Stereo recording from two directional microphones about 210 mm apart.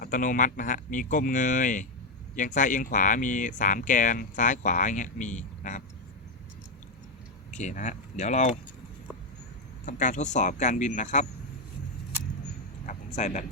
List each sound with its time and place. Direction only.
0.0 s speech: 40° left (ahead or behind)
7.5 s speech: 35° left (ahead or behind)
9.8 s speech: 35° left (ahead or behind)
12.8 s a sound: 35° left (ahead or behind)